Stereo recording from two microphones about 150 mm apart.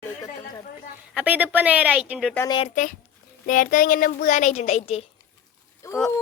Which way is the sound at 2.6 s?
55° left (ahead or behind).